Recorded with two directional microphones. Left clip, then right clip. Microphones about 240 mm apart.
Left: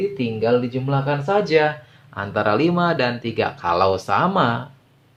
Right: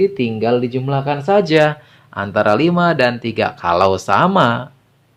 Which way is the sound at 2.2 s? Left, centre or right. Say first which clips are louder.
Right 5 dB; right.